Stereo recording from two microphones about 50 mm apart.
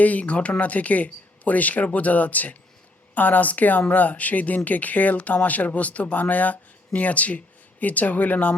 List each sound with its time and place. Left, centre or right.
0.0 s speech: left